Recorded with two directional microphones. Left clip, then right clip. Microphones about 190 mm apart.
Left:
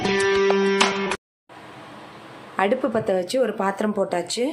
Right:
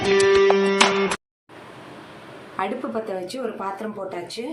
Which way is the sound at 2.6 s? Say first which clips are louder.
Left 5 dB; 40° left (ahead or behind).